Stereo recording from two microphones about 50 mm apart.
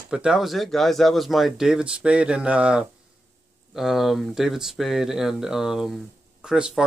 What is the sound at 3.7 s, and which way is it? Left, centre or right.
Speech, centre.